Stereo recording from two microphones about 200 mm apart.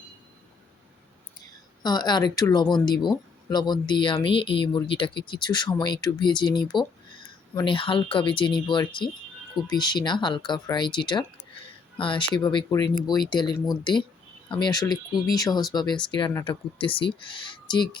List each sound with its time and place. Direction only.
1.8 s speech: 20° left (ahead or behind)